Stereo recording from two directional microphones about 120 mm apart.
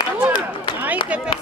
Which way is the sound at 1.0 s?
10° right (ahead or behind).